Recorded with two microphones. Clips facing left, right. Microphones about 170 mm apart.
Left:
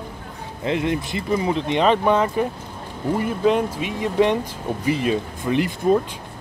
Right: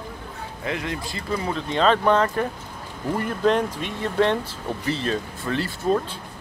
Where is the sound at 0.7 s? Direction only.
20° left (ahead or behind).